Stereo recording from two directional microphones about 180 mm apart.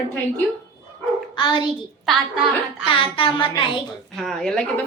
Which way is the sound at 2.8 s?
30° left (ahead or behind).